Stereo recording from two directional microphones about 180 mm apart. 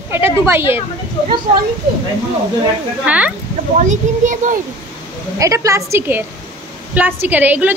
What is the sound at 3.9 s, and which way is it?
Speech, 45° right (ahead or behind).